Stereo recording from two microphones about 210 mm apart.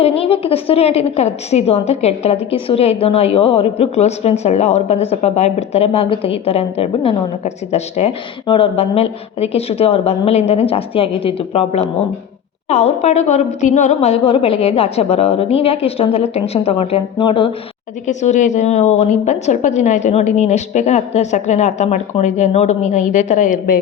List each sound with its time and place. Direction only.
0.0 s a woman's voice: 30° left (ahead or behind)
18.0 s a woman's voice: 35° left (ahead or behind)